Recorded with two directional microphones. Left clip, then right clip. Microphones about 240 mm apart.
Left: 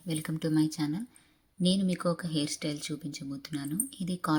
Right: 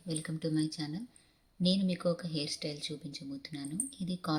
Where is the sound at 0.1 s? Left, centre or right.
Centre.